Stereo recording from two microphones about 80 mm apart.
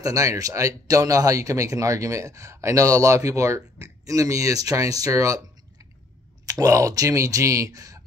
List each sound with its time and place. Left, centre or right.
0.0 s speech: right
6.4 s speech: right